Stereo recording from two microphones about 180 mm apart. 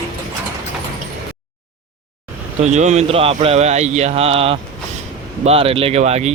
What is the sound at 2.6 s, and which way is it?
Speech, 40° right (ahead or behind).